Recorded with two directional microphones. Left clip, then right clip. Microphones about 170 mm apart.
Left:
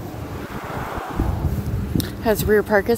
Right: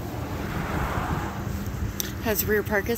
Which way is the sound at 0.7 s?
90° left.